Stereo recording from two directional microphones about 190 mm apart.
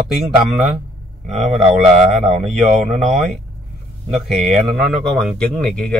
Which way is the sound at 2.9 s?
40° right (ahead or behind).